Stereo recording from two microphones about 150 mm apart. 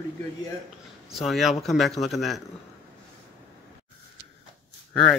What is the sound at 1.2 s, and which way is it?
Speech, centre (ahead or behind).